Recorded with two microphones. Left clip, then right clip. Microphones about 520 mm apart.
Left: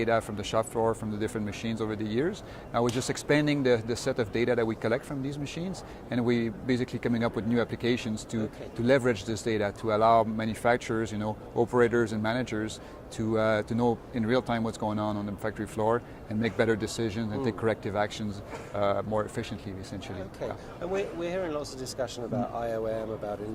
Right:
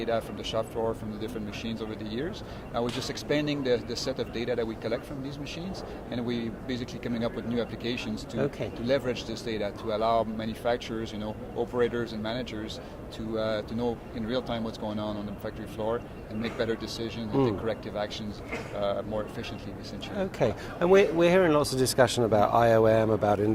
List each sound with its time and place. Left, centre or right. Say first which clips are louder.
0.0 s speech: left 2 dB; left
6.1 s speech: left 6 dB; left
20.4 s speech: right 9 dB; right